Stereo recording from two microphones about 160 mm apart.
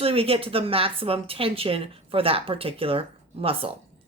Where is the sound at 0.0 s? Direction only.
35° right (ahead or behind).